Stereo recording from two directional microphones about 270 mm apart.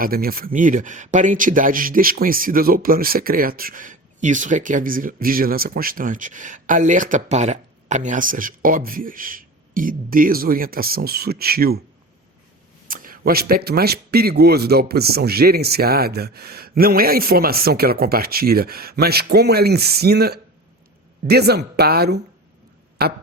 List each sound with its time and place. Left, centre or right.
0.0 s speech: right
12.9 s speech: right